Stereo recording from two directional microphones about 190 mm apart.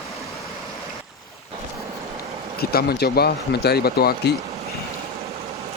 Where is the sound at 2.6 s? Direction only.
55° left (ahead or behind).